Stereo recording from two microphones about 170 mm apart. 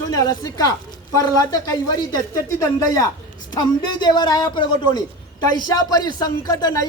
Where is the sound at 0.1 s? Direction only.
20° left (ahead or behind).